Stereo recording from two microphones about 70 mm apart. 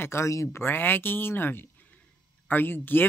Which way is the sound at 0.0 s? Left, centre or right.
Left.